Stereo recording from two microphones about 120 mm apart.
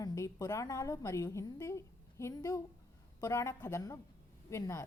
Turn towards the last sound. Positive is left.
turn(degrees=25)  # may be behind; listen again after turning